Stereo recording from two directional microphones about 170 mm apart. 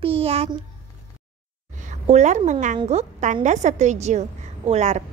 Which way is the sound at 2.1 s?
45° right (ahead or behind).